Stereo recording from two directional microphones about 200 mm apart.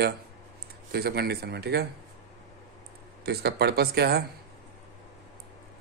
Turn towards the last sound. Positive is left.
turn(degrees=-50)  # may be behind; listen again after turning